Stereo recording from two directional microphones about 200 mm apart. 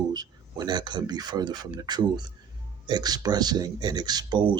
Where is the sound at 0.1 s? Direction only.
20° right (ahead or behind).